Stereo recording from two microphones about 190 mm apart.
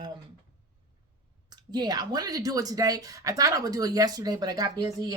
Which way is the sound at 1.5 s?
20° right (ahead or behind).